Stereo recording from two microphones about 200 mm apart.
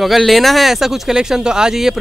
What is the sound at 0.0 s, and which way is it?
Speech, centre (ahead or behind).